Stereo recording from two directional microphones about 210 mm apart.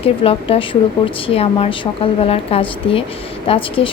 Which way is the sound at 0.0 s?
25° left (ahead or behind).